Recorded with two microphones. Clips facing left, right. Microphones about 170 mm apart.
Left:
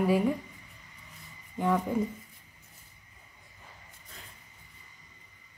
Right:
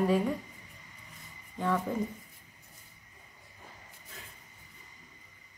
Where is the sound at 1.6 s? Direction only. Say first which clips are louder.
Left 3 dB; 15° left (ahead or behind).